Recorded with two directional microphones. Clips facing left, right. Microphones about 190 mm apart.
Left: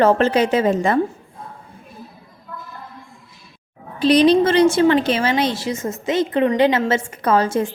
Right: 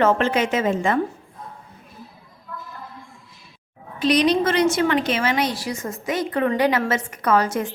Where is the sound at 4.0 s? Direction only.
30° left (ahead or behind).